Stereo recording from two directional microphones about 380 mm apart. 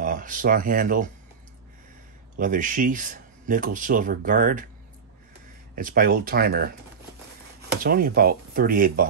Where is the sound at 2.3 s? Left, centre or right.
Right.